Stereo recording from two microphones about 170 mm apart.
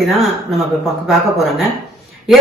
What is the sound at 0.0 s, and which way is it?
Speech, centre (ahead or behind).